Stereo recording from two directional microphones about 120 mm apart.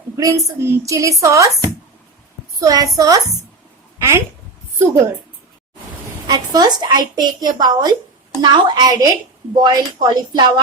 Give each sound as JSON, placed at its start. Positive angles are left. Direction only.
{"t": 0.2, "sound": "a woman's voice", "side_deg": -25}
{"t": 2.6, "sound": "a woman's voice", "side_deg": -30}
{"t": 3.9, "sound": "a sound", "side_deg": -25}
{"t": 6.2, "sound": "a woman's voice", "side_deg": -35}